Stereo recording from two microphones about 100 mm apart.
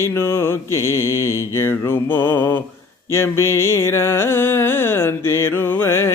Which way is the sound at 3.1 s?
25° left (ahead or behind).